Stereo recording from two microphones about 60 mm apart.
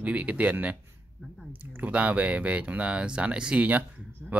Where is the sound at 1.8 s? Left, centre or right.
Right.